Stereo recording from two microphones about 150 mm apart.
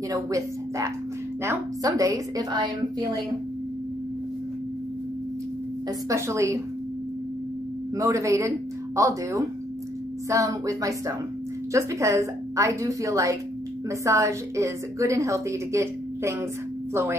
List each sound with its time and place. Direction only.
0.1 s a woman's voice: 20° right (ahead or behind)
6.0 s a woman's voice: 20° right (ahead or behind)
8.0 s a woman's voice: 20° right (ahead or behind)